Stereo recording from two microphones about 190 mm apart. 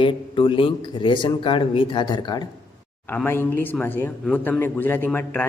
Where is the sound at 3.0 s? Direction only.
10° left (ahead or behind).